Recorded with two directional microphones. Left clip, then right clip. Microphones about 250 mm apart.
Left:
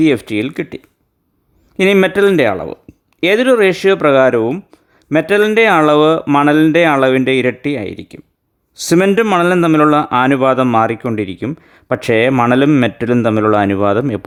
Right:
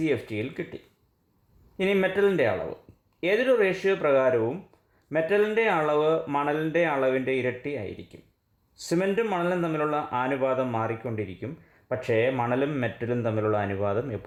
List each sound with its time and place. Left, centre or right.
0.0 s speech: left